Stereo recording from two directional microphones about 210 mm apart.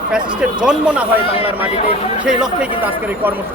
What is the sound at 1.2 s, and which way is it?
Speech, 25° left (ahead or behind).